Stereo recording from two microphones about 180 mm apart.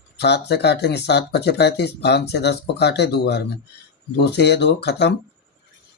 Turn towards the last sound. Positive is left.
turn(degrees=70)  # may be behind; listen again after turning